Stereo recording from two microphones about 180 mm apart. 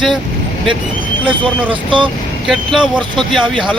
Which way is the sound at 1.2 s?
30° right (ahead or behind).